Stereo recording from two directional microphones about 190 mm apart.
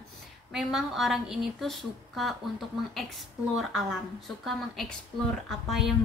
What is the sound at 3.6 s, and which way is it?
A woman's voice, centre (ahead or behind).